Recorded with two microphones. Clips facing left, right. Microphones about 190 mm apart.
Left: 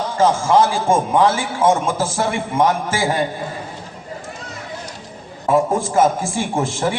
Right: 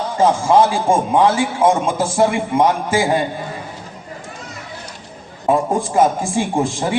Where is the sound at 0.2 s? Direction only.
15° right (ahead or behind).